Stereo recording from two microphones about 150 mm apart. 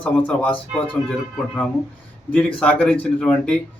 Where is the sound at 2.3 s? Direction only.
10° left (ahead or behind).